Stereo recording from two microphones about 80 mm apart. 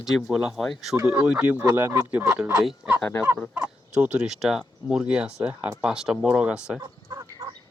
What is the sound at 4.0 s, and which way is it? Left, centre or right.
Speech, centre.